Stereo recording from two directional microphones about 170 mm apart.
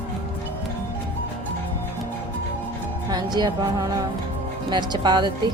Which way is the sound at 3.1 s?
25° right (ahead or behind).